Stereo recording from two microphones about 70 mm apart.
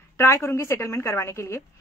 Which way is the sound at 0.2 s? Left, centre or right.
Left.